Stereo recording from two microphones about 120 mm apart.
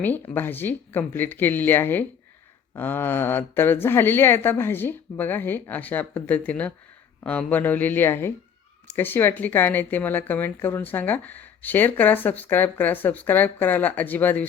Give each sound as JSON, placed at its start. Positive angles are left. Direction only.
{"t": 0.0, "sound": "speech", "side_deg": 15}